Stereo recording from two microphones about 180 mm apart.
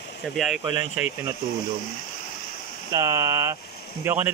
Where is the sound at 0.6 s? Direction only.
15° right (ahead or behind).